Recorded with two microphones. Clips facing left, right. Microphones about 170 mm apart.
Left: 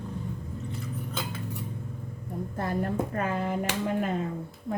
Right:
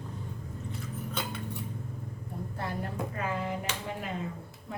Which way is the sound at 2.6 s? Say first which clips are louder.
Left 7 dB; 50° left (ahead or behind).